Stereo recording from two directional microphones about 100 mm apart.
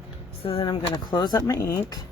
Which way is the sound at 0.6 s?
45° left (ahead or behind).